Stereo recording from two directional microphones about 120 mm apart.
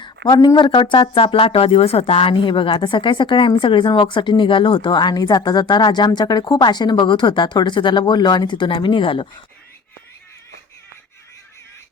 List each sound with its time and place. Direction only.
0.0 s speech: 35° left (ahead or behind)